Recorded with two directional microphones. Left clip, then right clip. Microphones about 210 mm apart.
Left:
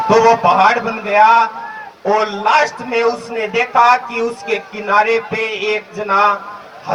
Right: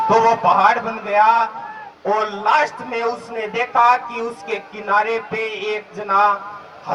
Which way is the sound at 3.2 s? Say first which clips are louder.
Left 5 dB; 10° left (ahead or behind).